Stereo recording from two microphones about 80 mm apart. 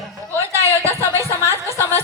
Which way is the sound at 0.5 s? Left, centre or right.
Right.